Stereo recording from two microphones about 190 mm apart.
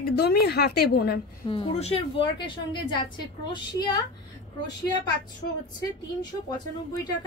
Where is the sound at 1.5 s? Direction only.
30° left (ahead or behind).